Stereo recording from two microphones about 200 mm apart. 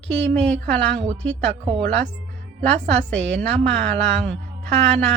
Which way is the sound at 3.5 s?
60° right (ahead or behind).